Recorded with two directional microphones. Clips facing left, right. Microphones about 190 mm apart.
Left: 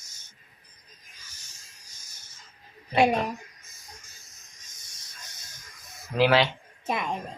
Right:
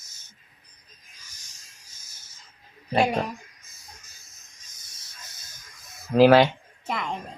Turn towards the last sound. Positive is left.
turn(degrees=20)  # may be behind; listen again after turning